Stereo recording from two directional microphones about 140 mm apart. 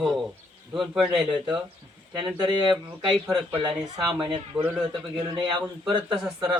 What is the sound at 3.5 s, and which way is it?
Speech, 35° right (ahead or behind).